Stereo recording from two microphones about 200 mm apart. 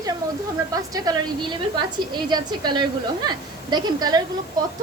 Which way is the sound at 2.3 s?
20° right (ahead or behind).